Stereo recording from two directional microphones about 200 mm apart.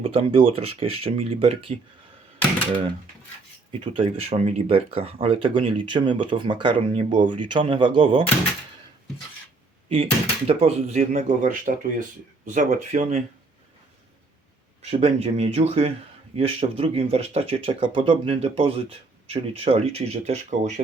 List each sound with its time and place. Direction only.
0.0 s speech: 30° right (ahead or behind)
3.7 s speech: 25° right (ahead or behind)
9.9 s speech: 30° right (ahead or behind)
14.8 s speech: 30° right (ahead or behind)